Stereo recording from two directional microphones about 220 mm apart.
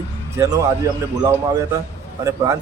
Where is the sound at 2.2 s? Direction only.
15° right (ahead or behind).